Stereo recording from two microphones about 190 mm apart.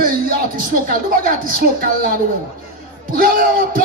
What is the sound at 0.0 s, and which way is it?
Speech, 50° right (ahead or behind).